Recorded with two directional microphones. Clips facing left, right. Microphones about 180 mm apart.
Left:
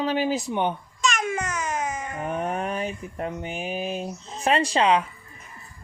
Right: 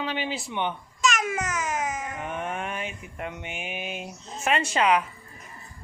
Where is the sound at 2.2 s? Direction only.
40° left (ahead or behind).